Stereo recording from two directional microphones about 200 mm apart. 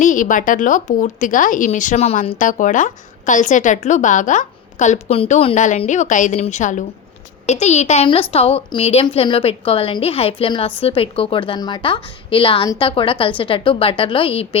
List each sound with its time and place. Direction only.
0.0 s a woman's voice: 40° left (ahead or behind)